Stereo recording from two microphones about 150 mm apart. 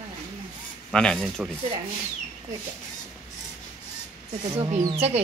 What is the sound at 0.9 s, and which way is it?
Speech, 5° left (ahead or behind).